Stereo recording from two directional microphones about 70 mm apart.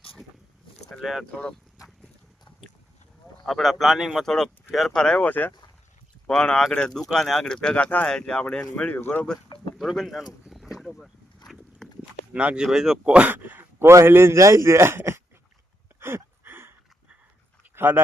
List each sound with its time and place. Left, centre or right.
0.9 s a sound: centre
3.4 s a man's voice: centre
5.2 s speech: left
6.2 s speech: centre
8.0 s speech: centre
8.7 s speech: left
9.7 s a man's voice: centre
10.4 s a sound: centre
12.3 s a man's voice: centre; by 15.2 s right
16.0 s a sound: right
17.7 s speech: right